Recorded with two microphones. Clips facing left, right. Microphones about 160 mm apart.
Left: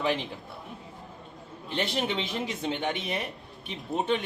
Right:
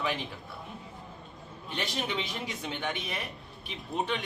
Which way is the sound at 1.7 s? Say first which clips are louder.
Left 4 dB; 25° left (ahead or behind).